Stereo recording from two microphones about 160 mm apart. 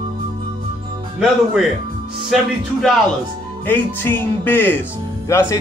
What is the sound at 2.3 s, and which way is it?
Music, centre (ahead or behind).